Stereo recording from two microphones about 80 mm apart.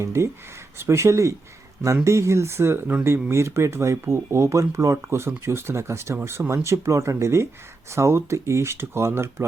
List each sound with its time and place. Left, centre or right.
0.0 s speech: right